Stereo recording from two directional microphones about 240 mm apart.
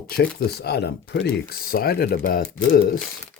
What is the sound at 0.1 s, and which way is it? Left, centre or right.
Speech, left.